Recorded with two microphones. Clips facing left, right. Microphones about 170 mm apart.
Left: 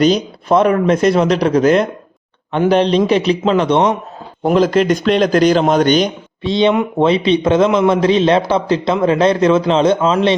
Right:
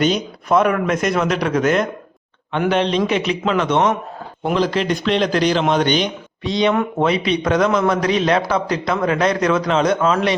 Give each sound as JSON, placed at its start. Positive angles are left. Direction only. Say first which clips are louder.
{"t": 0.0, "sound": "speech", "louder": "left 5 dB", "side_deg": 35}
{"t": 4.4, "sound": "a man's voice", "louder": "left 6 dB", "side_deg": 45}
{"t": 6.4, "sound": "a man's voice", "louder": "left 4 dB", "side_deg": 25}